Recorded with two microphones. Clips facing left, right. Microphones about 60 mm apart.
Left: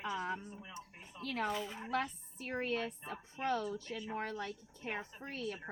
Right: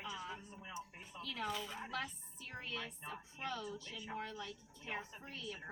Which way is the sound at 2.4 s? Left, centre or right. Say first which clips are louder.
Left 9 dB; left.